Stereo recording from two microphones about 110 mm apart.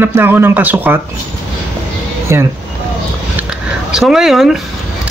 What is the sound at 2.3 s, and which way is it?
Speech, 25° right (ahead or behind).